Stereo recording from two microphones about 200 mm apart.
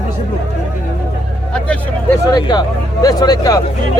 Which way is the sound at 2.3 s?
20° left (ahead or behind).